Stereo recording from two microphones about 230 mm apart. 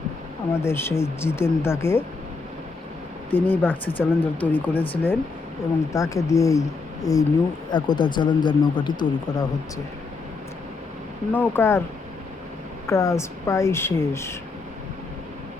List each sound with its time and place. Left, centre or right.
0.5 s speech: centre
3.3 s speech: centre
5.9 s speech: centre
11.3 s speech: centre
12.9 s speech: centre